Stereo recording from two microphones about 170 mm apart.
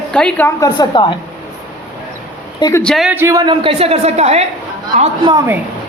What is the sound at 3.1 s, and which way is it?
Speech, 20° right (ahead or behind).